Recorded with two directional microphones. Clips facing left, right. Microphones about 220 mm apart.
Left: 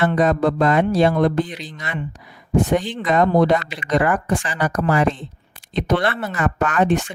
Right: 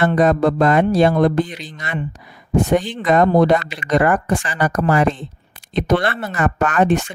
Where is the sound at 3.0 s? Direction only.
45° right (ahead or behind).